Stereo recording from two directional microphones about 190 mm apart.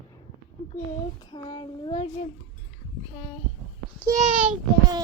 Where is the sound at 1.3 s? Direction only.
20° left (ahead or behind).